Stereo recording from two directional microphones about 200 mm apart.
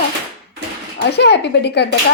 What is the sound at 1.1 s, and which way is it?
Speech, 55° left (ahead or behind).